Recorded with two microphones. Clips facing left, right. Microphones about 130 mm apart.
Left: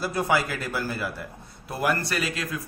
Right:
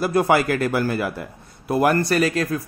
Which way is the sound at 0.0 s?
60° right (ahead or behind).